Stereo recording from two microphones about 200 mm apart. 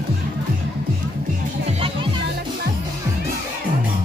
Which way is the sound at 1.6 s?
30° right (ahead or behind).